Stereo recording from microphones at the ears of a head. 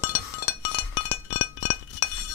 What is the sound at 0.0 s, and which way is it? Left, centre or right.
Chink, left.